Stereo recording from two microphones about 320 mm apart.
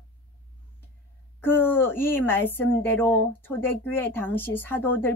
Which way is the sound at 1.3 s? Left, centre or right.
Centre.